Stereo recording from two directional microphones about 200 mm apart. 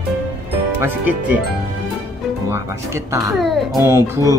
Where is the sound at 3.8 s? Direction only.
15° right (ahead or behind).